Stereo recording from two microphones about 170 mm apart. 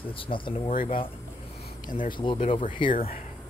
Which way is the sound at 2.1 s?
30° left (ahead or behind).